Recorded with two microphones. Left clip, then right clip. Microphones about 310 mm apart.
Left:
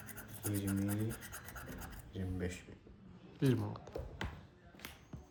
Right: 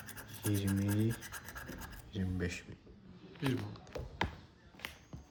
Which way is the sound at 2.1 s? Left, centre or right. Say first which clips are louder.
Right 3 dB; right.